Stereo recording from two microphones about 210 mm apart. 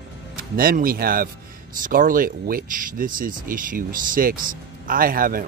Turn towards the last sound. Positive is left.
turn(degrees=-45)  # may be behind; listen again after turning